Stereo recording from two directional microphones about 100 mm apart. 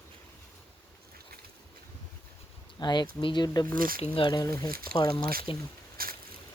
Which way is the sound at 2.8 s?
45° left (ahead or behind).